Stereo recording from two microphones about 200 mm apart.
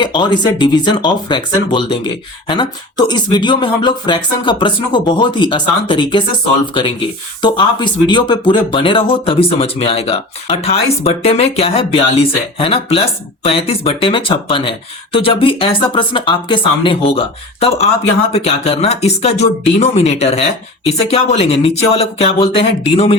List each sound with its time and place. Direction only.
0.0 s speech: 20° left (ahead or behind)
7.4 s speech: 20° left (ahead or behind)